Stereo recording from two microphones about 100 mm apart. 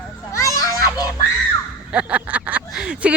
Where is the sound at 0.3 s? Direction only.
35° left (ahead or behind).